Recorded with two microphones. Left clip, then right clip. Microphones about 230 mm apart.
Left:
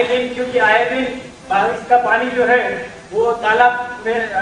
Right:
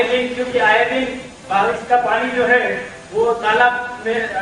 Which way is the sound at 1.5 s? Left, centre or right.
Right.